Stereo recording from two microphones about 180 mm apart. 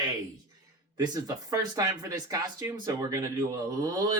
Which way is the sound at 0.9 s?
20° right (ahead or behind).